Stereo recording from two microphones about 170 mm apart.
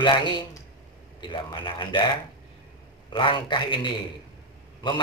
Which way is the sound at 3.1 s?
30° left (ahead or behind).